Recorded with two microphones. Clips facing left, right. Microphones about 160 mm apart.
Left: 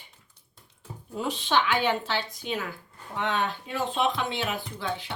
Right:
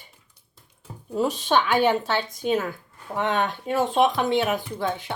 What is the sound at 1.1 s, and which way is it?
Speech, 45° right (ahead or behind).